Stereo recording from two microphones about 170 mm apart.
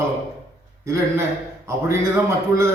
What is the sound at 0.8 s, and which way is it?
A man's voice, 15° right (ahead or behind).